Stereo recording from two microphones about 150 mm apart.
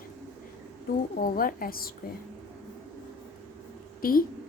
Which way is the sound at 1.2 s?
70° left (ahead or behind).